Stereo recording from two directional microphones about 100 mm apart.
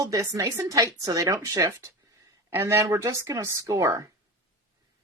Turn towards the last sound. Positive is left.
turn(degrees=-35)  # may be behind; listen again after turning